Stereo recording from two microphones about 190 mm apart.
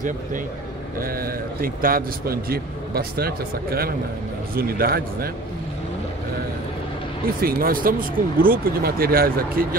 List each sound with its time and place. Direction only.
0.9 s a man's voice: 50° right (ahead or behind)
7.4 s a man's voice: 50° right (ahead or behind)